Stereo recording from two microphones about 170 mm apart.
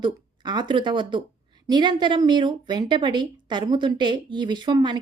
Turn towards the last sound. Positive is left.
turn(degrees=-25)  # may be behind; listen again after turning